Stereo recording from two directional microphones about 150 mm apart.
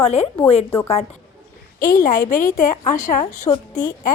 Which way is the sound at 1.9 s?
60° left (ahead or behind).